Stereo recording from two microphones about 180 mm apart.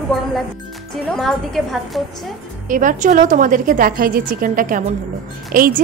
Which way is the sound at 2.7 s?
45° right (ahead or behind).